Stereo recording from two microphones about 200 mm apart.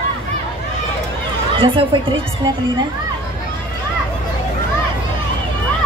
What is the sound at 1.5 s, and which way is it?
Speech, 25° right (ahead or behind).